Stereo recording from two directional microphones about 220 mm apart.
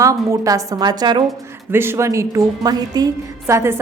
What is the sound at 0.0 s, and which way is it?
A woman's voice, 15° right (ahead or behind).